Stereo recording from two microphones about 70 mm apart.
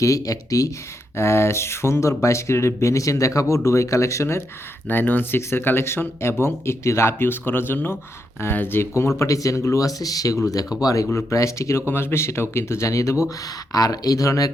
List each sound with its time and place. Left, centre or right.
0.0 s speech: left
1.1 s speech: left
4.9 s speech: left
8.9 s speech: left
13.7 s speech: left